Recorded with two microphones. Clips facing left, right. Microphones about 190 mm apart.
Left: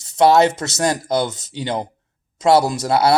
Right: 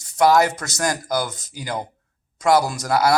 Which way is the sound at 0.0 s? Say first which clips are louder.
Left 3 dB; 25° left (ahead or behind).